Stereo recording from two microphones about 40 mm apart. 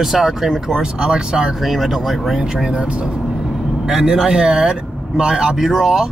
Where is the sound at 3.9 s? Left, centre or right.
Centre.